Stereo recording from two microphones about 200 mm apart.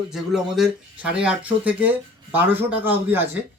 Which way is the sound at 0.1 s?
Centre (ahead or behind).